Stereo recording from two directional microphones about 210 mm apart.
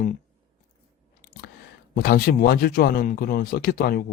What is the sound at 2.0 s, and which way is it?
Speech, 45° left (ahead or behind).